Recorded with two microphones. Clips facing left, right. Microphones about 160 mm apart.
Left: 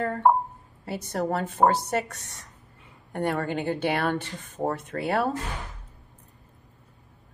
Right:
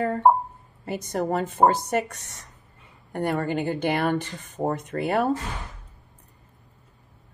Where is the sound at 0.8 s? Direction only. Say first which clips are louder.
Right 2 dB; 15° right (ahead or behind).